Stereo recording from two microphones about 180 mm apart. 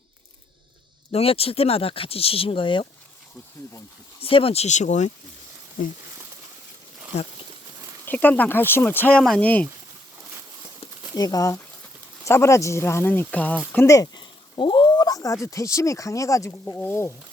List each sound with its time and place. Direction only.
1.1 s speech: 35° left (ahead or behind)
4.2 s speech: 30° left (ahead or behind)
8.0 s speech: 10° left (ahead or behind)
11.1 s speech: 20° left (ahead or behind)